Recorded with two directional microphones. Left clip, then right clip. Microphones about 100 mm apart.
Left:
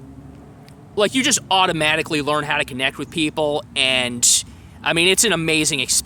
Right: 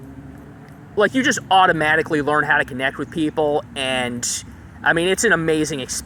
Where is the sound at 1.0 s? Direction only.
40° left (ahead or behind).